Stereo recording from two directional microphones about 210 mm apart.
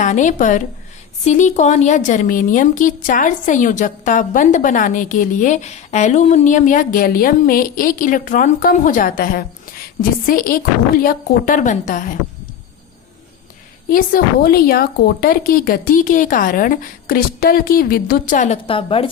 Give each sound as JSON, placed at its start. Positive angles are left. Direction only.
{"t": 0.0, "sound": "a woman's voice", "side_deg": 35}
{"t": 13.9, "sound": "a woman's voice", "side_deg": 40}